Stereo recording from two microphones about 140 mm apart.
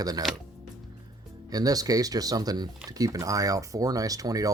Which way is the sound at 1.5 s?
25° right (ahead or behind).